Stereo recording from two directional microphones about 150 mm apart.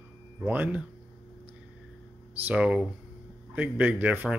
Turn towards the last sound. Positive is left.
turn(degrees=-10)  # may be behind; listen again after turning